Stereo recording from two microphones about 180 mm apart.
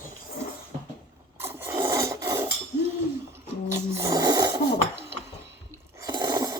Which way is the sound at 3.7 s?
15° right (ahead or behind).